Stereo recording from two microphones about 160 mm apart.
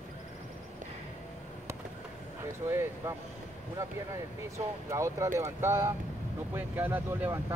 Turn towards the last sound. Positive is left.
turn(degrees=-10)  # may be behind; listen again after turning